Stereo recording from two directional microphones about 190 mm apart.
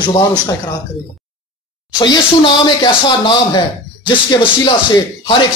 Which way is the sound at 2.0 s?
20° left (ahead or behind).